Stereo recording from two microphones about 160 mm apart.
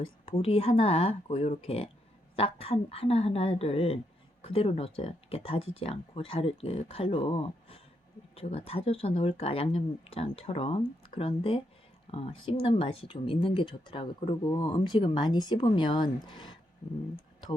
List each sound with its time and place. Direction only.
0.3 s speech: 35° left (ahead or behind)